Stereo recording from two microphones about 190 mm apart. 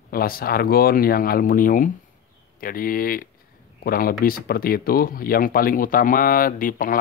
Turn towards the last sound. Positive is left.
turn(degrees=45)  # may be behind; listen again after turning